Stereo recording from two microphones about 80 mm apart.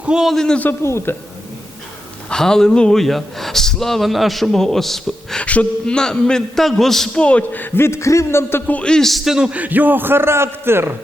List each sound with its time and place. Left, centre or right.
0.0 s a man's voice: centre
0.3 s a man's voice: centre
0.6 s a man's voice: left
2.3 s speech: centre
5.4 s a man's voice: centre; by 8.6 s left
8.6 s a man's voice: centre; by 10.9 s right